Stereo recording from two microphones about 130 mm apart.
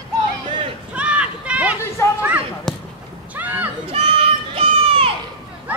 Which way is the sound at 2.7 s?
5° left (ahead or behind).